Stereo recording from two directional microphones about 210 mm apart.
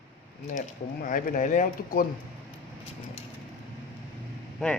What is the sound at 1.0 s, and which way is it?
A man's voice, 40° left (ahead or behind).